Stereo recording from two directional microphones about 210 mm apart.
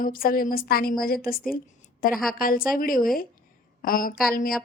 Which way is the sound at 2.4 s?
45° left (ahead or behind).